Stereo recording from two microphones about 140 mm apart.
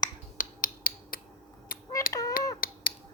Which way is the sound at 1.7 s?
90° left.